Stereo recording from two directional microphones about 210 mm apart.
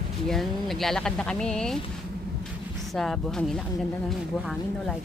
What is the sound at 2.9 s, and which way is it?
Speech, centre (ahead or behind).